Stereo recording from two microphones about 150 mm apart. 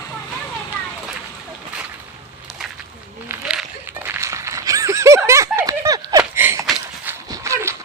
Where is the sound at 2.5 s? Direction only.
Centre (ahead or behind); by 7.8 s 20° right (ahead or behind).